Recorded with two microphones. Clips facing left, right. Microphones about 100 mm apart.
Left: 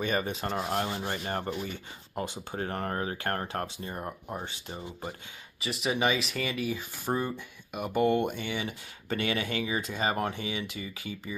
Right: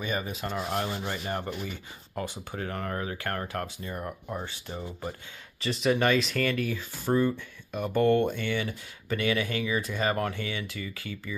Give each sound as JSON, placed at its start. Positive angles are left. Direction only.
{"t": 0.0, "sound": "speech", "side_deg": 35}
{"t": 2.1, "sound": "speech", "side_deg": 25}
{"t": 2.6, "sound": "speech", "side_deg": 35}
{"t": 5.6, "sound": "speech", "side_deg": 5}
{"t": 9.1, "sound": "speech", "side_deg": 30}